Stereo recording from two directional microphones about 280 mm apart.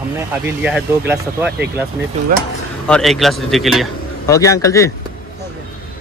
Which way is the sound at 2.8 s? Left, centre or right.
Centre.